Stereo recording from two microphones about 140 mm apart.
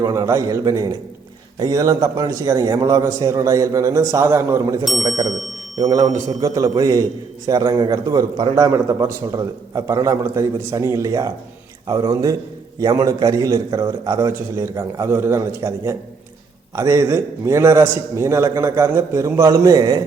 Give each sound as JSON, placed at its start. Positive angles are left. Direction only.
{"t": 0.0, "sound": "a man's voice", "side_deg": -25}